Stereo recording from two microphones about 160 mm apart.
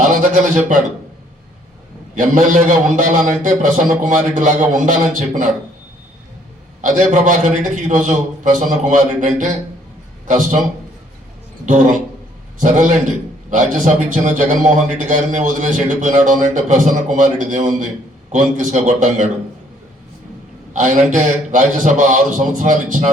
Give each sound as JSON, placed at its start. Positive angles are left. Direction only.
{"t": 0.2, "sound": "speech", "side_deg": -55}
{"t": 2.1, "sound": "a man's voice", "side_deg": -55}
{"t": 6.8, "sound": "a man's voice", "side_deg": -55}
{"t": 11.6, "sound": "a man's voice", "side_deg": -50}
{"t": 20.7, "sound": "a man's voice", "side_deg": -50}